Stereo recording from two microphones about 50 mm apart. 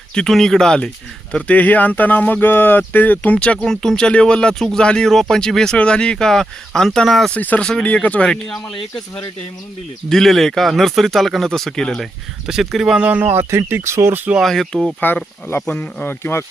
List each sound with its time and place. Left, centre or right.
0.1 s speech: centre
1.5 s speech: left
3.3 s speech: left
3.6 s speech: centre
7.3 s speech: left
10.1 s speech: centre
12.5 s speech: centre
13.0 s speech: right
13.2 s speech: right
14.4 s speech: centre
15.0 s speech: left